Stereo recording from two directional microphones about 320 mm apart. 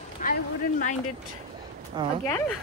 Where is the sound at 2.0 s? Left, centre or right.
Centre.